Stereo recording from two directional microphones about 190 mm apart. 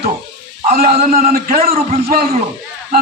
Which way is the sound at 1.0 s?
50° right (ahead or behind).